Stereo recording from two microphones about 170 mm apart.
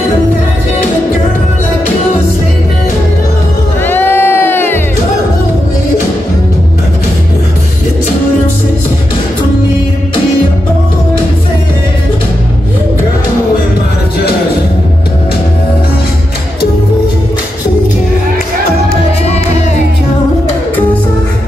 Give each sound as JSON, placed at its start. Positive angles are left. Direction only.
{"t": 3.8, "sound": "crowd", "side_deg": 10}